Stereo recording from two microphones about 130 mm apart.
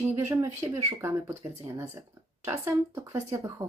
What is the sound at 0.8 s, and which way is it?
Speech, 20° right (ahead or behind).